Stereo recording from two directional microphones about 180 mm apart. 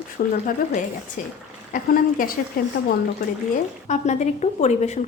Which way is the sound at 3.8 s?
40° left (ahead or behind).